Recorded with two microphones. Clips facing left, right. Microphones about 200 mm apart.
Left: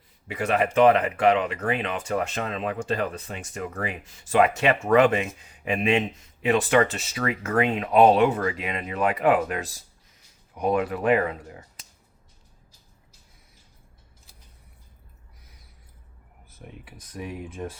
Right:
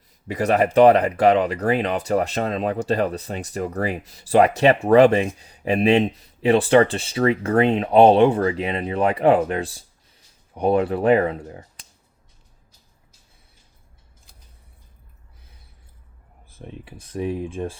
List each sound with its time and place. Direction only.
0.3 s speech: 40° right (ahead or behind)
16.5 s speech: 25° right (ahead or behind)